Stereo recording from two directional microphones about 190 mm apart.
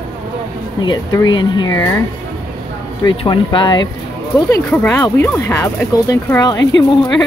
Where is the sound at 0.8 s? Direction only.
20° left (ahead or behind).